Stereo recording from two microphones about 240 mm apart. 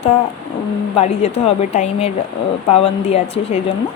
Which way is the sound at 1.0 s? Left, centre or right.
Left.